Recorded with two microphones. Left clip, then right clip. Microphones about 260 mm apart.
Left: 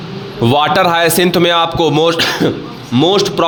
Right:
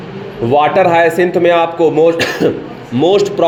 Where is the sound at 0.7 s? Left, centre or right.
Left.